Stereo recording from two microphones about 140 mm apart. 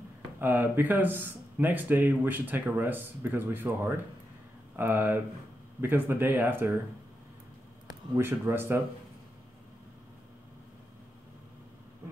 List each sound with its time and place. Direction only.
0.4 s speech: 15° right (ahead or behind)
8.1 s speech: 15° right (ahead or behind)